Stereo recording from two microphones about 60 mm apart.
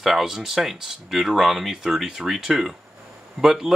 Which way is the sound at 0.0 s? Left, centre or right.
Centre.